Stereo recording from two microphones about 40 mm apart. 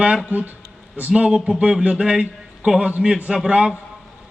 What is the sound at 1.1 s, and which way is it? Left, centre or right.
A man's voice, right.